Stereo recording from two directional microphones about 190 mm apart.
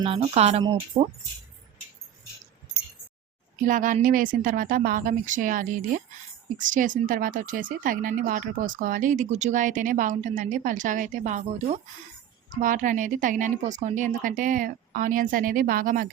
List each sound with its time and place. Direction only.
0.0 s music: 30° right (ahead or behind)
0.9 s speech: 25° right (ahead or behind)
3.7 s speech: 45° right (ahead or behind)